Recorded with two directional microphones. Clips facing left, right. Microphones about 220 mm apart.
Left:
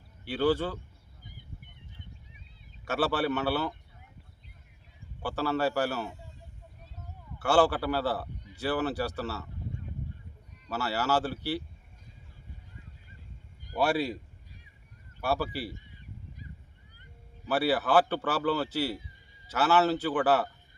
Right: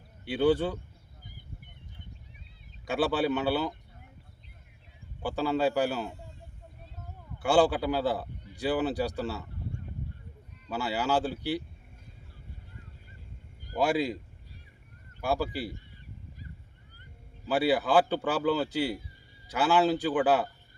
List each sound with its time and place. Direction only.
0.3 s speech: 15° right (ahead or behind)
2.8 s speech: 15° right (ahead or behind)
5.2 s speech: 15° right (ahead or behind)
7.3 s speech: 15° right (ahead or behind)
10.7 s speech: 15° right (ahead or behind)
13.7 s speech: 15° right (ahead or behind)
15.2 s speech: 15° right (ahead or behind)
17.4 s speech: 15° right (ahead or behind)